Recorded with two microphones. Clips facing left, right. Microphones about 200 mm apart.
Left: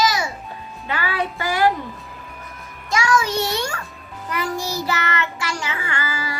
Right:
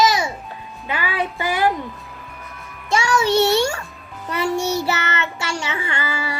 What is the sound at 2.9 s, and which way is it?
Music, 30° right (ahead or behind).